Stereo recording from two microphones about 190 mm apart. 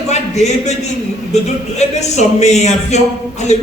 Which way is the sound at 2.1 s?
35° left (ahead or behind).